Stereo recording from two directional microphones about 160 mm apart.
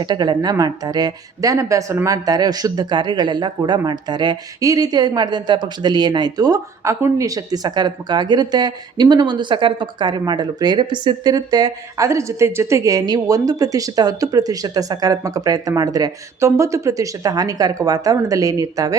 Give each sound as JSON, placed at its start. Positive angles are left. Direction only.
{"t": 0.0, "sound": "a woman's voice", "side_deg": -25}